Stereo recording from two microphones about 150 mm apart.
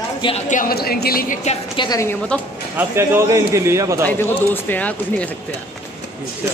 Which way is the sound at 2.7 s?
15° right (ahead or behind).